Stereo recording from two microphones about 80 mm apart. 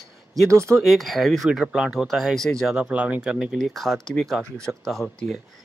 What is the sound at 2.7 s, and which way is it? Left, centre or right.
Speech, centre.